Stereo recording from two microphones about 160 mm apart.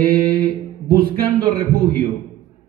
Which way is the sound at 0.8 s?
65° right (ahead or behind).